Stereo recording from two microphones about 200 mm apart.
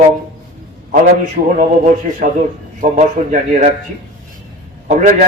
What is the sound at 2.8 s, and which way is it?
Speech, 40° right (ahead or behind).